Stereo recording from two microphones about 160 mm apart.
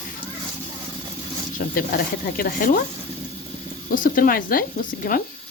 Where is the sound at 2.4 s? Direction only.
60° left (ahead or behind).